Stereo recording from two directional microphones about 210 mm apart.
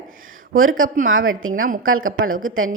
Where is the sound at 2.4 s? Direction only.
75° right (ahead or behind).